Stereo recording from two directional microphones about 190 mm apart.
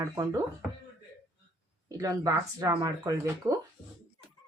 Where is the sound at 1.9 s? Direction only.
20° right (ahead or behind).